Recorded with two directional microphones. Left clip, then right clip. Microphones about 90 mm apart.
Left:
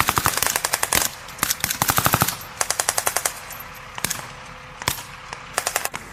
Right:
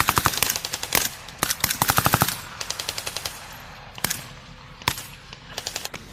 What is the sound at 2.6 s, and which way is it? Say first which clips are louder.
Machine gun: left 9 dB; 35° left (ahead or behind).